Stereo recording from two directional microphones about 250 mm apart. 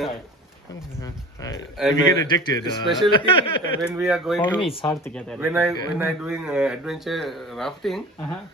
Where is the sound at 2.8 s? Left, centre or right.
Centre.